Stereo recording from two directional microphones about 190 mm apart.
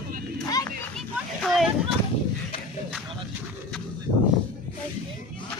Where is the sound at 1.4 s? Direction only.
Centre (ahead or behind).